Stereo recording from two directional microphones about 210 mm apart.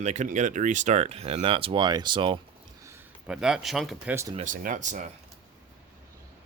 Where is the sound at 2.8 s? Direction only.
10° right (ahead or behind).